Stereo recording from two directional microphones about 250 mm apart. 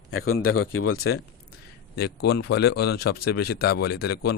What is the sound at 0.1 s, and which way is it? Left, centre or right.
Speech, left.